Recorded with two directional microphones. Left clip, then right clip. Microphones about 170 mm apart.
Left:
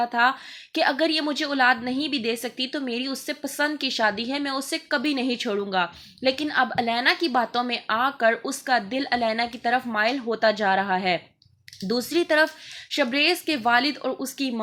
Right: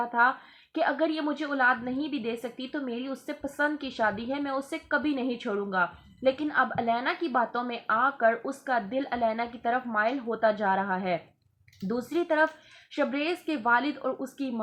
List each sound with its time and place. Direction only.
0.0 s a woman's voice: 25° left (ahead or behind)